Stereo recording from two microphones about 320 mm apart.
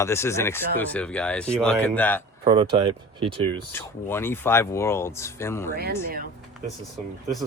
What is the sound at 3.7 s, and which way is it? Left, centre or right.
Speech, centre.